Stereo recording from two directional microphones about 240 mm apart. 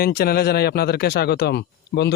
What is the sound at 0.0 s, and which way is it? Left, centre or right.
A man's voice, left.